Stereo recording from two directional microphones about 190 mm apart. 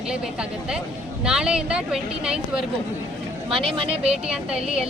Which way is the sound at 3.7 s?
30° right (ahead or behind).